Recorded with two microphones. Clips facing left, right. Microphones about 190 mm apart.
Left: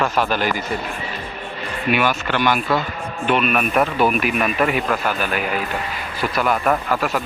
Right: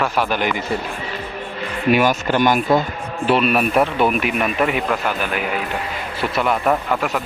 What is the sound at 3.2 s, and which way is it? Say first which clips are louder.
Speech: right 2 dB; 35° right (ahead or behind).